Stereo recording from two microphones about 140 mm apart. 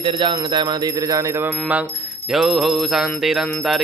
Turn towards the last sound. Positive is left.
turn(degrees=0)  # may be behind; listen again after turning